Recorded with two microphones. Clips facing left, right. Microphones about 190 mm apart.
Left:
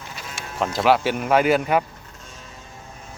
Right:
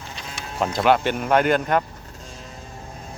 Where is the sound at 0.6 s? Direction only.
Centre (ahead or behind).